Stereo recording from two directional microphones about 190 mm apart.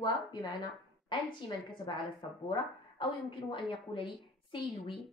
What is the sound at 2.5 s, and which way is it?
A woman's voice, 25° left (ahead or behind).